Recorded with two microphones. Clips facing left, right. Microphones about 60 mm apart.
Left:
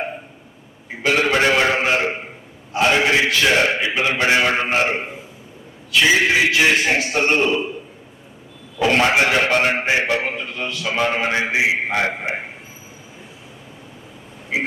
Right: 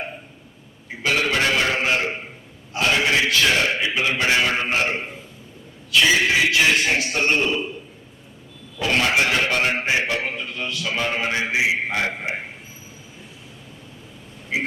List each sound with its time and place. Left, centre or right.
1.0 s a sound: centre
3.6 s a man's voice: centre
8.8 s a man's voice: left; by 10.9 s centre
10.9 s a man's voice: centre